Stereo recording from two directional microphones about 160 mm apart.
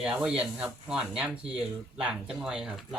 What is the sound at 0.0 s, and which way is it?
Speech, 5° right (ahead or behind).